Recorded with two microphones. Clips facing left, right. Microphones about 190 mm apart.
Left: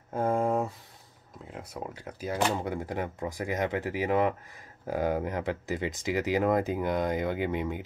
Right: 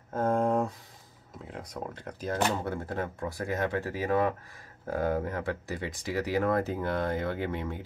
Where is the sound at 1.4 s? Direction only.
5° left (ahead or behind).